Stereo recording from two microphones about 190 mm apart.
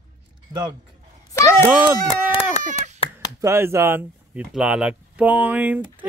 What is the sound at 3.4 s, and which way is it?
Speech, 15° right (ahead or behind).